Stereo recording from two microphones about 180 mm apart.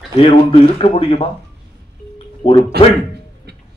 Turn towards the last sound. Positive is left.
turn(degrees=-65)  # may be behind; listen again after turning